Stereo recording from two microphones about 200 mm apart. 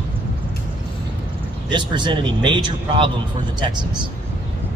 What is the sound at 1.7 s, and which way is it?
Speech, 25° right (ahead or behind).